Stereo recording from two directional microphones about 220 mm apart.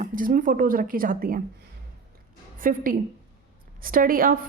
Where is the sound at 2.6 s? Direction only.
40° right (ahead or behind).